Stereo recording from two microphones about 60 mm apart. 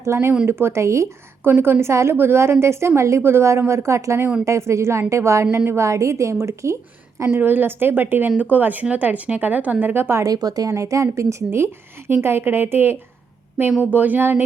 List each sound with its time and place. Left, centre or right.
0.0 s a woman's voice: right
1.5 s a woman's voice: right
7.3 s speech: right
10.2 s a woman's voice: right